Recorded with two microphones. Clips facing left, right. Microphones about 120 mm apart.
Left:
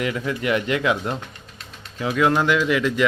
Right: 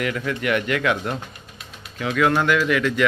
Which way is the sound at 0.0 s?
25° left (ahead or behind).